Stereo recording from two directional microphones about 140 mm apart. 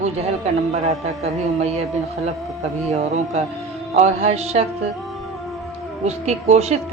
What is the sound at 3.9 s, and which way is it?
Speech, 50° right (ahead or behind).